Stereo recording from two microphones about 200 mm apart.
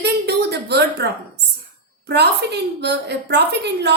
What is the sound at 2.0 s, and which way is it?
A woman's voice, 55° right (ahead or behind).